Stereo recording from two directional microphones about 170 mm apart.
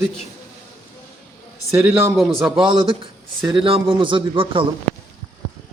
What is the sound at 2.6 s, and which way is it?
Speech, 30° right (ahead or behind).